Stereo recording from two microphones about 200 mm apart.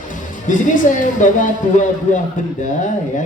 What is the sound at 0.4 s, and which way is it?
A man's voice, 40° left (ahead or behind).